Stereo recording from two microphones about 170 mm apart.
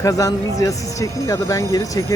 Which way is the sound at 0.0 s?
20° left (ahead or behind).